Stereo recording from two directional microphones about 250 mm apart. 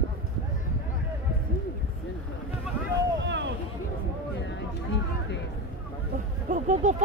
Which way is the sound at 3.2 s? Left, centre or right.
Right.